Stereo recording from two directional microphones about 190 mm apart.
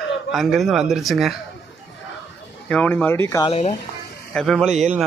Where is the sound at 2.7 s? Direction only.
5° left (ahead or behind).